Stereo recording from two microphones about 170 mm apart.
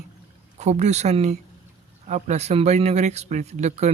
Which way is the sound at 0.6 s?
40° right (ahead or behind).